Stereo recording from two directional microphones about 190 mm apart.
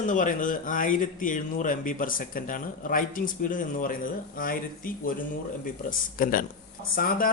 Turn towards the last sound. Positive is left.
turn(degrees=50)  # may be behind; listen again after turning